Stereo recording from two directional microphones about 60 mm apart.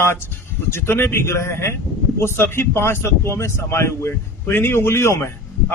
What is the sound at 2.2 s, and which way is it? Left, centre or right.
Speech, left.